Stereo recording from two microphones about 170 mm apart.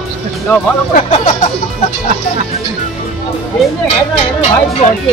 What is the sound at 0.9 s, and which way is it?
Speech, 40° left (ahead or behind).